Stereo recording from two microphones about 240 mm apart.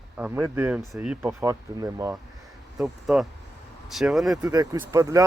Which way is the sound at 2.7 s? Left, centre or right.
Centre.